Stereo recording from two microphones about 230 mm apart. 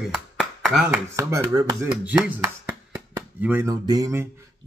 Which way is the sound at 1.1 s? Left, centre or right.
Centre.